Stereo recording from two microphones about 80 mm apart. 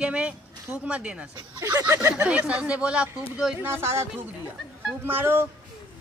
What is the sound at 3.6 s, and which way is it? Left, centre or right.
Speech, right.